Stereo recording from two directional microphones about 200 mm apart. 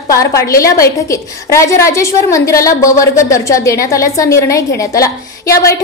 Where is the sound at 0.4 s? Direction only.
15° left (ahead or behind).